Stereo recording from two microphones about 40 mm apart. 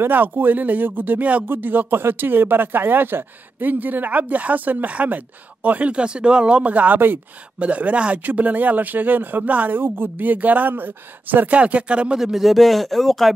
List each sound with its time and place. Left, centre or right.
0.1 s speech: right
1.5 s speech: right
3.7 s speech: right
6.6 s speech: right
8.2 s speech: right
9.7 s speech: right
11.5 s speech: right
12.2 s speech: centre